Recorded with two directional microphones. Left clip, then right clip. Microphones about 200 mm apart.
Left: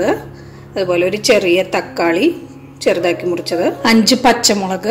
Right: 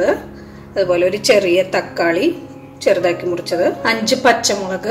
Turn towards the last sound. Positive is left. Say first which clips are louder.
# left 2 dB
turn(degrees=40)  # may be behind; listen again after turning